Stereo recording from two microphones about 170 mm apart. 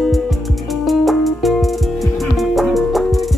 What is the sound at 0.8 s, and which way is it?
Music, centre (ahead or behind).